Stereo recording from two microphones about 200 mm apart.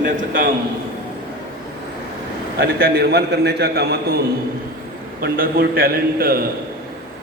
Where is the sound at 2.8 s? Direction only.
50° right (ahead or behind).